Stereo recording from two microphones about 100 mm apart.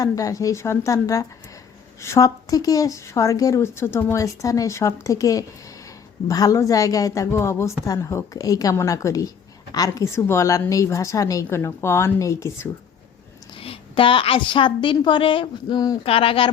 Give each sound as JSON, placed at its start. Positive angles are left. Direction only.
{"t": 0.0, "sound": "speech", "side_deg": 35}
{"t": 13.6, "sound": "a woman's voice", "side_deg": 65}
{"t": 16.0, "sound": "speech", "side_deg": 70}